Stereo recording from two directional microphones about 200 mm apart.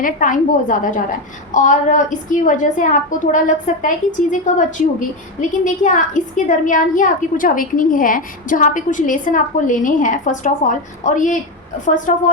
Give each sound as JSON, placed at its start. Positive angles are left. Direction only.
{"t": 0.0, "sound": "a woman's voice", "side_deg": 40}